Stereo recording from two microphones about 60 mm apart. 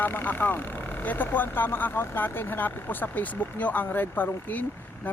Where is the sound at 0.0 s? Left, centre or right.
Left.